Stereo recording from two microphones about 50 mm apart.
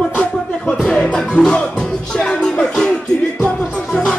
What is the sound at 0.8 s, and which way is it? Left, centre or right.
Music, centre.